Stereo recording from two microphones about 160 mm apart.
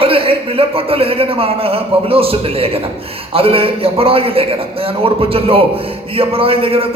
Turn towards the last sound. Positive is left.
turn(degrees=-35)  # may be behind; listen again after turning